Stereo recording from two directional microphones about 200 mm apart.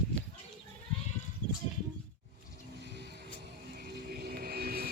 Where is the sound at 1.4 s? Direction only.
20° right (ahead or behind).